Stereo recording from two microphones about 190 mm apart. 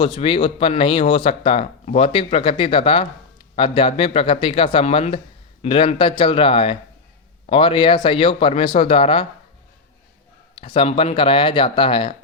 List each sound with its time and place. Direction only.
0.0 s speech: 30° left (ahead or behind)
10.6 s speech: 30° left (ahead or behind)